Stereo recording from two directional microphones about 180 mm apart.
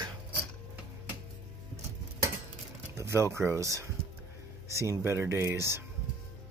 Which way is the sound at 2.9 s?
15° right (ahead or behind).